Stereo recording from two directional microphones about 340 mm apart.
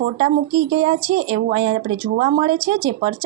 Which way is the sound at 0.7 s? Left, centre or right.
Centre.